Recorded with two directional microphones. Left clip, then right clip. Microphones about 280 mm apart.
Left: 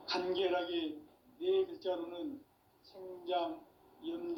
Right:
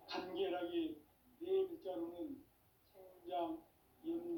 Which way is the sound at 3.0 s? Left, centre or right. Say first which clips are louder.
Left 11 dB; left.